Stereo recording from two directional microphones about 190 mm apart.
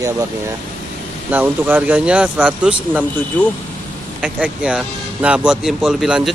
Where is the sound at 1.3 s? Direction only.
10° right (ahead or behind).